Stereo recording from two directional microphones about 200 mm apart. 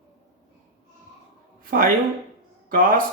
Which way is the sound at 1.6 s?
45° right (ahead or behind).